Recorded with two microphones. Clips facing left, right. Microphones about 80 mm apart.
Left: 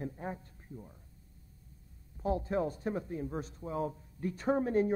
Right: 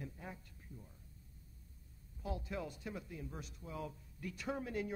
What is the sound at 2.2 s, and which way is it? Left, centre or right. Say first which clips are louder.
Speech: left 11 dB; left.